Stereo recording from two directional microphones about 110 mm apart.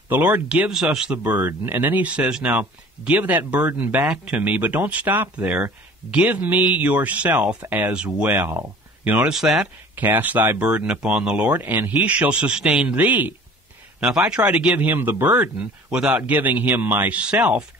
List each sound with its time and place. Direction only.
0.1 s speech: 15° right (ahead or behind)
8.4 s speech: 20° right (ahead or behind)